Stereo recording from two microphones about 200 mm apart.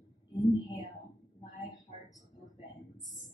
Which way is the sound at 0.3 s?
20° left (ahead or behind).